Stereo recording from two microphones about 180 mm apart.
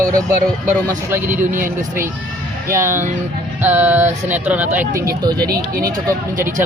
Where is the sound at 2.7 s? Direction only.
15° right (ahead or behind).